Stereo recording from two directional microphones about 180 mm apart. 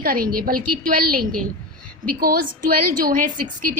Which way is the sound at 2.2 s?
50° right (ahead or behind).